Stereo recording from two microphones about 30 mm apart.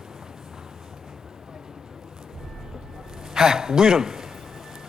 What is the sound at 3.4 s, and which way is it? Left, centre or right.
Speech, centre.